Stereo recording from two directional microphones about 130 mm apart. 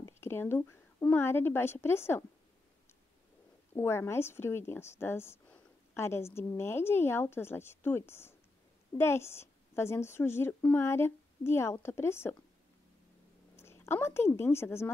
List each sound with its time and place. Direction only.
0.0 s a woman's voice: 20° left (ahead or behind)
3.7 s speech: 20° left (ahead or behind)
13.6 s a woman's voice: 20° left (ahead or behind)